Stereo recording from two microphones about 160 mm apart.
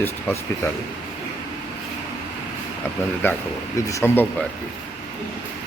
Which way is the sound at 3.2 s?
15° left (ahead or behind).